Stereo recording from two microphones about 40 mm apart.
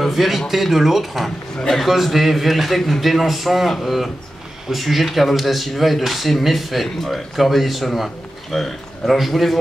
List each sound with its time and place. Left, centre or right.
0.0 s speech: centre